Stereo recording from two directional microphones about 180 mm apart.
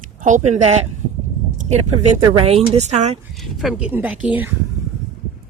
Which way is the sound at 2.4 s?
35° right (ahead or behind).